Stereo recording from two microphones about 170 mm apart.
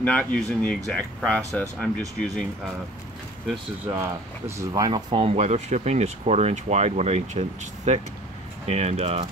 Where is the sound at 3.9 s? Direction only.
15° right (ahead or behind); by 9.2 s 35° right (ahead or behind).